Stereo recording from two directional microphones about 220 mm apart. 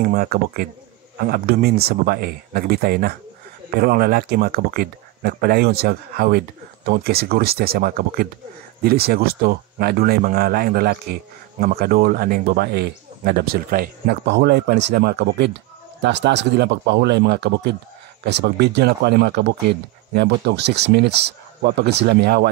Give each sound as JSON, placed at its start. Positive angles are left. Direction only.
{"t": 0.0, "sound": "speech", "side_deg": -40}